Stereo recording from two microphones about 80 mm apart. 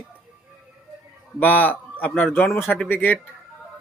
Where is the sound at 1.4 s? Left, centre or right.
Left.